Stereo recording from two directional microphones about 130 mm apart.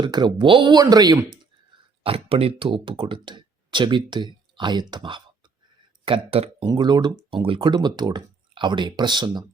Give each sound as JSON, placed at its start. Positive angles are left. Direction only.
{"t": 0.0, "sound": "speech", "side_deg": -35}
{"t": 2.0, "sound": "speech", "side_deg": -45}
{"t": 6.7, "sound": "speech", "side_deg": -35}